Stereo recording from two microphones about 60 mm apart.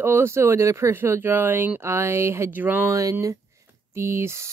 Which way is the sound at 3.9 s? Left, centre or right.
Right.